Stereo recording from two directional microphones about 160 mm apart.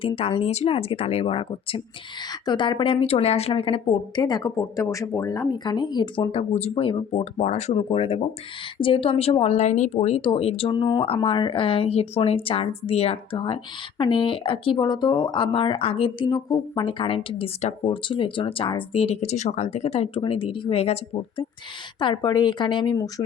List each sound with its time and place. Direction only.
0.0 s speech: 35° left (ahead or behind)
21.9 s a woman's voice: 30° left (ahead or behind)